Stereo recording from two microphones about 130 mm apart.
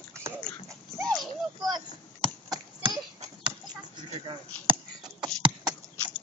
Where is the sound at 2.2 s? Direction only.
40° right (ahead or behind).